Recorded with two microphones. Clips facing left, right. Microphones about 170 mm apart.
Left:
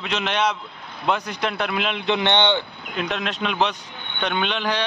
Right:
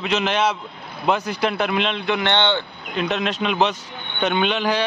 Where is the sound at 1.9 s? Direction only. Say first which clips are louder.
Even; 20° left (ahead or behind).